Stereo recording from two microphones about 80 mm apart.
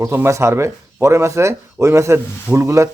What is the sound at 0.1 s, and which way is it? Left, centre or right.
Speech, right.